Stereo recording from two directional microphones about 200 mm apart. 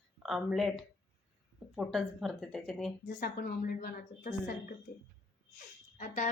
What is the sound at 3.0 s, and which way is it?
A woman's voice, 50° left (ahead or behind).